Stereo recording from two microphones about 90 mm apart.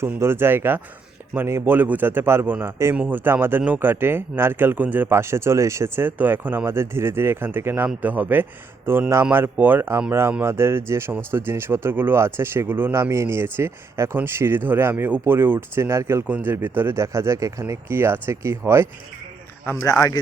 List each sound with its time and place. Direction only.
0.0 s speech: 30° right (ahead or behind)
16.2 s speech: 20° right (ahead or behind); by 17.9 s 35° right (ahead or behind)
17.9 s speech: 25° right (ahead or behind)
19.6 s a man's voice: 30° left (ahead or behind)
19.9 s speech: 40° left (ahead or behind)